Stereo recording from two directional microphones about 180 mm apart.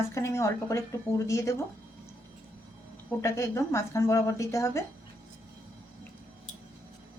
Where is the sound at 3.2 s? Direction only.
15° left (ahead or behind).